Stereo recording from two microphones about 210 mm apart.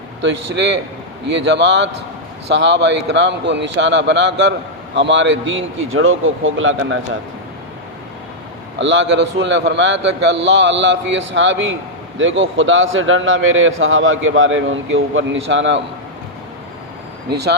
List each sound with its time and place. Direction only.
0.2 s a man's voice: 60° right (ahead or behind)
8.8 s a man's voice: 60° right (ahead or behind)
17.2 s speech: 50° right (ahead or behind)